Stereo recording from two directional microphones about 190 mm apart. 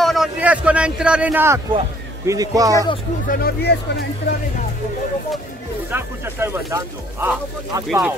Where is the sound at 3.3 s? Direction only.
55° left (ahead or behind).